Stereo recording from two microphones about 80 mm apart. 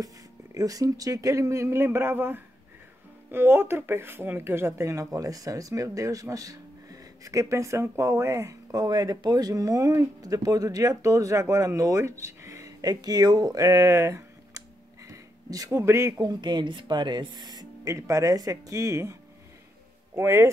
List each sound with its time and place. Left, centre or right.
0.6 s speech: right
8.7 s speech: right
12.8 s speech: right
15.0 s a sound: right
15.8 s speech: right
16.3 s speech: right
17.9 s speech: right
20.2 s speech: right